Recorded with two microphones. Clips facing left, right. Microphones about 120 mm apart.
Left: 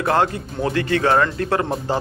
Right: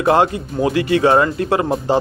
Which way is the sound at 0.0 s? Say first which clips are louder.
Right 4 dB; 20° right (ahead or behind).